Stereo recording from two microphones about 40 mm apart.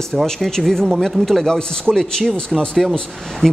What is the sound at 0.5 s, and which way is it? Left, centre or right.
Speech, centre.